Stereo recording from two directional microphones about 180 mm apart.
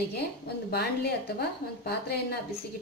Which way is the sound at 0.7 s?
60° left (ahead or behind).